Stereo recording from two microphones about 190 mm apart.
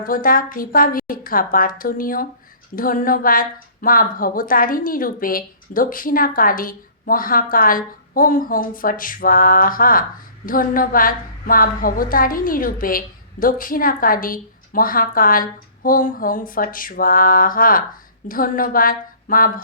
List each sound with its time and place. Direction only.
0.0 s a woman's voice: 45° left (ahead or behind)